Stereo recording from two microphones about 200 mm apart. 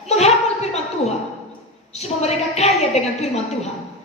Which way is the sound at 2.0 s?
30° left (ahead or behind).